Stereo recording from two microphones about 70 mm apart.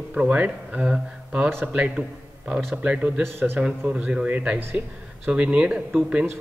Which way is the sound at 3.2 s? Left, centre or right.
Right.